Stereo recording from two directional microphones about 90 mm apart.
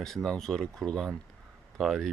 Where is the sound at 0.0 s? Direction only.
5° left (ahead or behind).